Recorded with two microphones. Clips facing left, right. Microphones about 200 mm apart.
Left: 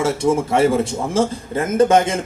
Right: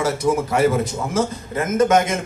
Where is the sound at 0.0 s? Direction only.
25° left (ahead or behind).